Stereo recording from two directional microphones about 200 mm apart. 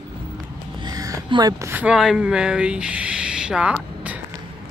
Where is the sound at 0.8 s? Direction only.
15° right (ahead or behind).